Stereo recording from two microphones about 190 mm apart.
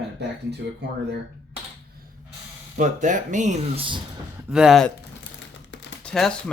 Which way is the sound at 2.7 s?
40° right (ahead or behind).